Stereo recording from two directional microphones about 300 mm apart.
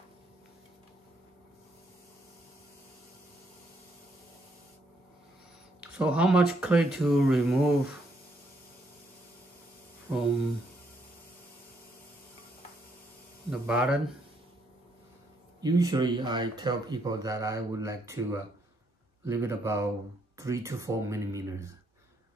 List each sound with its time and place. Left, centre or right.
5.8 s speech: centre
13.5 s speech: centre
15.6 s speech: centre